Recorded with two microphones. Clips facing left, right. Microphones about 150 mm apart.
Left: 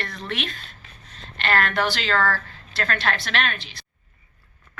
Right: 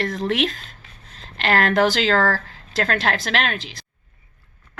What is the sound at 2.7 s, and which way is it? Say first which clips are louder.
A woman's voice: right 4 dB; 90° right.